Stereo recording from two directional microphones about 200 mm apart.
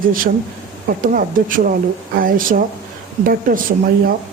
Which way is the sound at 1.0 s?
45° right (ahead or behind).